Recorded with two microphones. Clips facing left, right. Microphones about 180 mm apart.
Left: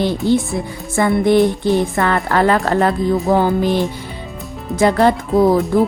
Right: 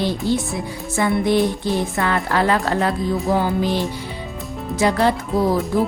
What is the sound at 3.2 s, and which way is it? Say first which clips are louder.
Music: left 4 dB; 55° left (ahead or behind).